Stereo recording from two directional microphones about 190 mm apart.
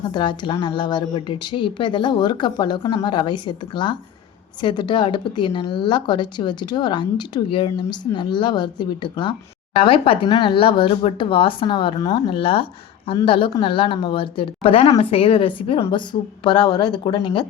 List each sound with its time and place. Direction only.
0.1 s a woman's voice: 25° left (ahead or behind)